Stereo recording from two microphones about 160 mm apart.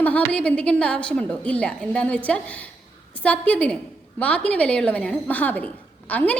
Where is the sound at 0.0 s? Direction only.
10° left (ahead or behind).